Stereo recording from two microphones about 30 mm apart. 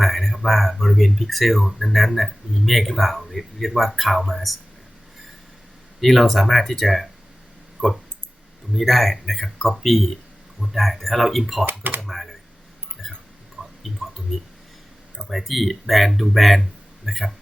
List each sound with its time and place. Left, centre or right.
0.0 s speech: centre
6.0 s speech: centre
7.8 s speech: centre
8.7 s speech: centre
11.6 s speech: right
11.9 s speech: centre
13.0 s a sound: centre
15.3 s speech: centre